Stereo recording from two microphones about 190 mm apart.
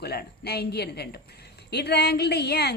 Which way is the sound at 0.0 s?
60° left (ahead or behind).